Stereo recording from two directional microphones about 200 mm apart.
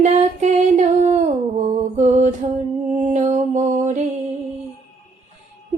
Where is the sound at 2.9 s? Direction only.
35° right (ahead or behind).